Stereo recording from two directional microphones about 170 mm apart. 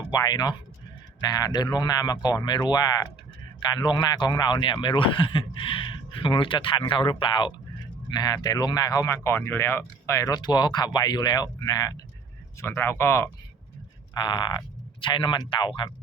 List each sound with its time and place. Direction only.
0.1 s speech: 25° left (ahead or behind)
14.1 s speech: 25° left (ahead or behind)